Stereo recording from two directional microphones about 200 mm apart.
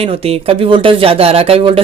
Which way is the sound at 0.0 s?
30° right (ahead or behind).